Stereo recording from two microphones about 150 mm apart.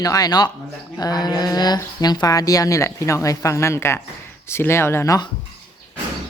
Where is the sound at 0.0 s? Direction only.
25° left (ahead or behind).